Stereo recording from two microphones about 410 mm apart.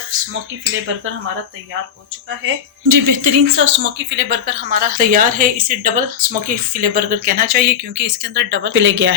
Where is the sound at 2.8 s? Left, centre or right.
Right.